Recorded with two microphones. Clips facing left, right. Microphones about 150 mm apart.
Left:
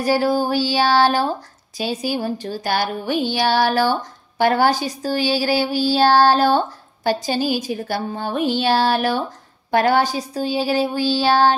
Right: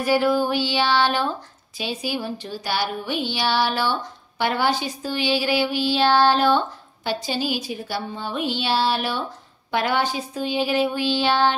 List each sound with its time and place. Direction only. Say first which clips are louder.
0.0 s speech: left 1 dB; 35° left (ahead or behind)